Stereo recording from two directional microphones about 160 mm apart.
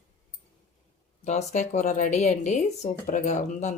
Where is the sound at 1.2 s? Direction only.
45° left (ahead or behind).